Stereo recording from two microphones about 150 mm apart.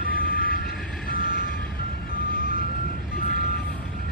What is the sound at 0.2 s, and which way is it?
Vehicle, 80° left.